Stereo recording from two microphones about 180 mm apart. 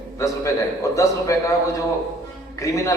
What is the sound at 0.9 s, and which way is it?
Speech, 15° left (ahead or behind).